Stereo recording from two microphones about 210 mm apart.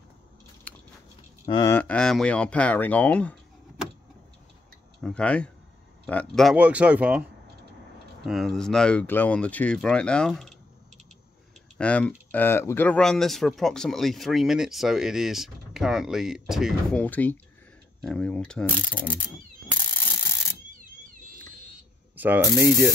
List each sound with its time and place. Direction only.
0.7 s biting: 10° left (ahead or behind)
1.5 s speech: 20° left (ahead or behind)
1.8 s speech: 5° left (ahead or behind)
5.0 s speech: 5° left (ahead or behind)
8.3 s speech: centre (ahead or behind)
11.8 s speech: 5° left (ahead or behind)
19.9 s rub: 10° left (ahead or behind)
22.1 s ratchet: 10° right (ahead or behind)
22.6 s spray: 15° right (ahead or behind)